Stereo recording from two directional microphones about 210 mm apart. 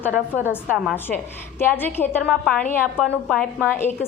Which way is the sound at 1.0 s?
10° left (ahead or behind).